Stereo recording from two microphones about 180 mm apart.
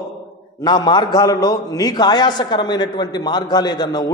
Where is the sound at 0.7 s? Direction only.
25° left (ahead or behind).